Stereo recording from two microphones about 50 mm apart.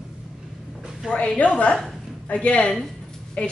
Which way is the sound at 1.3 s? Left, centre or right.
Left.